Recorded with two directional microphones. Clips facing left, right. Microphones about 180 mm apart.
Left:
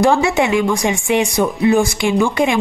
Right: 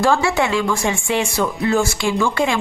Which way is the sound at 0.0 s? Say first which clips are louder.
Left 3 dB; 20° left (ahead or behind).